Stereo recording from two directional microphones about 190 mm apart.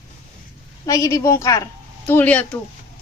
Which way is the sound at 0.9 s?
15° left (ahead or behind).